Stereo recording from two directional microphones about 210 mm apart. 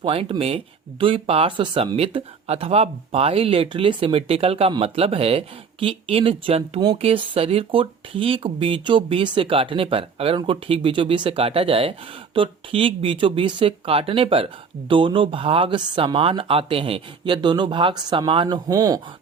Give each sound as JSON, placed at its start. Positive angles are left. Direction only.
{"t": 0.0, "sound": "speech", "side_deg": -25}